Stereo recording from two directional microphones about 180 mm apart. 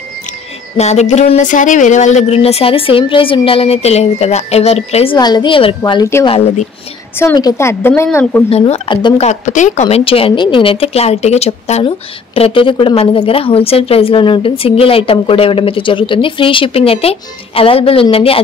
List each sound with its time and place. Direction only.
0.7 s a woman's voice: 40° left (ahead or behind); by 6.2 s 20° left (ahead or behind)
6.2 s a woman's voice: 35° left (ahead or behind)
7.2 s a woman's voice: 15° left (ahead or behind)
8.5 s a woman's voice: 35° left (ahead or behind)
8.9 s speech: 25° left (ahead or behind)
9.3 s a woman's voice: 45° left (ahead or behind)